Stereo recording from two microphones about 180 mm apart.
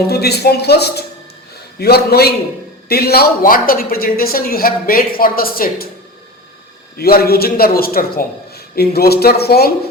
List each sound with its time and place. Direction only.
0.1 s a man's voice: 60° left (ahead or behind)
6.9 s a man's voice: 60° left (ahead or behind)